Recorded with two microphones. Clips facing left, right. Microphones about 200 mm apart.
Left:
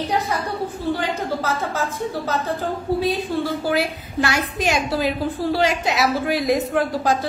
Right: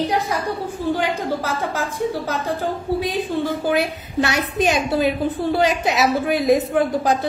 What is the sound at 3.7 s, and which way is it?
A woman's voice, 20° right (ahead or behind).